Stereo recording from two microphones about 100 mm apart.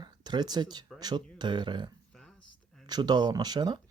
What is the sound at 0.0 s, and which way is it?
Speech, 45° right (ahead or behind).